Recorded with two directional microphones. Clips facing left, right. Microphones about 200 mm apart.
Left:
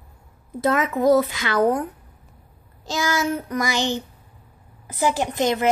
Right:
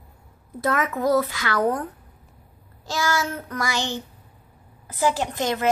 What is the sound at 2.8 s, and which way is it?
A woman's voice, 20° left (ahead or behind).